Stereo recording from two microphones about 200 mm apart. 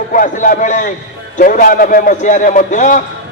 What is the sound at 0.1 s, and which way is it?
Speech, 40° left (ahead or behind).